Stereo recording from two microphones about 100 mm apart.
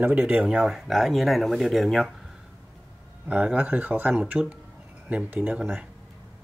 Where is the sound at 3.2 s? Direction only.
15° right (ahead or behind).